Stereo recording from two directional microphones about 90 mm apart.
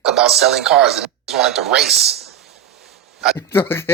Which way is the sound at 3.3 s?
25° left (ahead or behind).